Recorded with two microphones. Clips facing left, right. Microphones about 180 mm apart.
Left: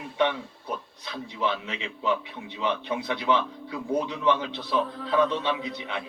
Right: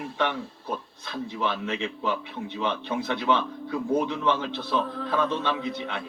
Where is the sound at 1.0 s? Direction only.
15° left (ahead or behind).